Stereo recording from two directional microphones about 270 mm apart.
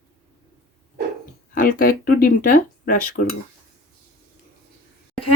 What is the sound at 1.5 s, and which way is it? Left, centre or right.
Speech, left.